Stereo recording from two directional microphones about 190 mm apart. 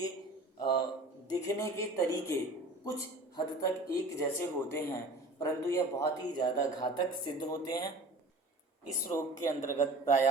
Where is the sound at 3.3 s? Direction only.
15° left (ahead or behind).